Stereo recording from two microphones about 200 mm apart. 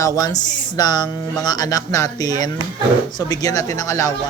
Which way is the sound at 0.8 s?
20° left (ahead or behind).